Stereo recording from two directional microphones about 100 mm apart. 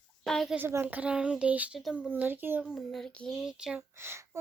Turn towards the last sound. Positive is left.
turn(degrees=-25)  # may be behind; listen again after turning